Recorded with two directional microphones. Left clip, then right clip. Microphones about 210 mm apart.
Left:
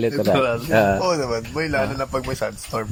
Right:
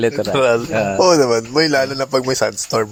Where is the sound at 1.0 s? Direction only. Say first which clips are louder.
Right 9 dB; 45° right (ahead or behind).